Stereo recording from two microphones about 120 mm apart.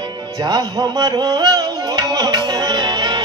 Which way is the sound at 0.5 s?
30° right (ahead or behind).